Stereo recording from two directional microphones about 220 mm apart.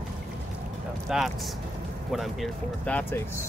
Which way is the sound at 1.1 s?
Centre (ahead or behind).